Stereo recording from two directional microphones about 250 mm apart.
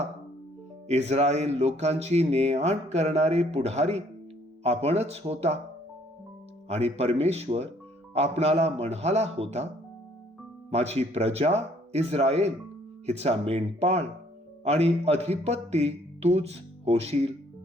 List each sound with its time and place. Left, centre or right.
0.9 s speech: right
6.7 s speech: right
10.7 s speech: right